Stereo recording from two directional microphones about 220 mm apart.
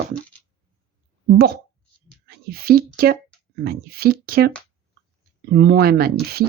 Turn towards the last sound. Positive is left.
turn(degrees=-45)  # may be behind; listen again after turning